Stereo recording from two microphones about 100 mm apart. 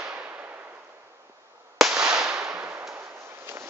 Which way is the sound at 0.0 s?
10° right (ahead or behind).